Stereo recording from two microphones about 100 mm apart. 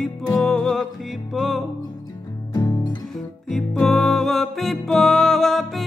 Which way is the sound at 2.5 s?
40° left (ahead or behind).